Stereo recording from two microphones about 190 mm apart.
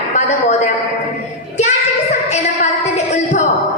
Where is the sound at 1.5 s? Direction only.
35° left (ahead or behind).